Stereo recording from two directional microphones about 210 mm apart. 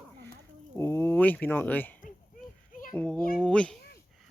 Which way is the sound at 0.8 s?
10° left (ahead or behind).